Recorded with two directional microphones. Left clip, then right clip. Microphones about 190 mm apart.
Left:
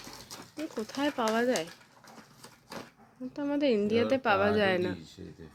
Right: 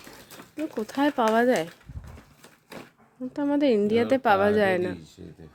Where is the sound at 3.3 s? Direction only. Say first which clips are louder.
Right 5 dB; 25° right (ahead or behind).